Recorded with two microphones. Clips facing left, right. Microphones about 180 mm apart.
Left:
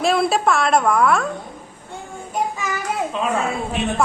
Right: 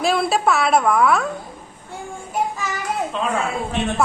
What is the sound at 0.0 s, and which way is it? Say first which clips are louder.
A woman's voice: left 1 dB; centre (ahead or behind).